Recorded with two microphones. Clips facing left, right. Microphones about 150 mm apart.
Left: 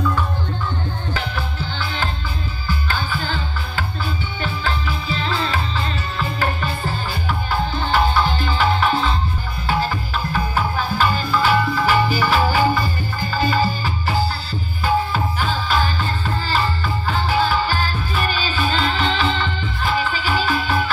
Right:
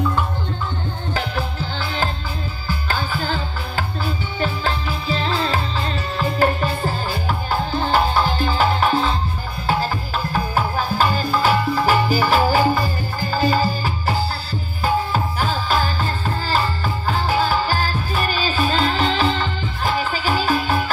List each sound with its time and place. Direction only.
1.1 s music: 40° right (ahead or behind)